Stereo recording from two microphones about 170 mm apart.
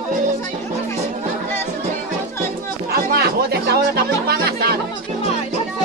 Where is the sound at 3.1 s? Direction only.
65° right (ahead or behind).